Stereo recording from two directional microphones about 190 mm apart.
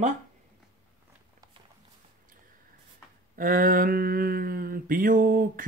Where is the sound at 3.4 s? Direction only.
45° right (ahead or behind).